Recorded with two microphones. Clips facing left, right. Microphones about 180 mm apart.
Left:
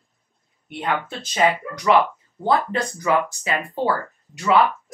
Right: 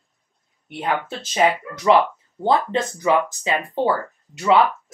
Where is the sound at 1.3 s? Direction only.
25° right (ahead or behind).